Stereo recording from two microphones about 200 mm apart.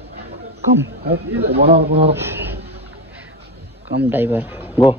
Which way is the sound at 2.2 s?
10° right (ahead or behind).